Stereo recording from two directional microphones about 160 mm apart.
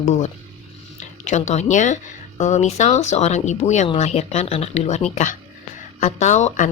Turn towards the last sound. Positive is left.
turn(degrees=50)  # may be behind; listen again after turning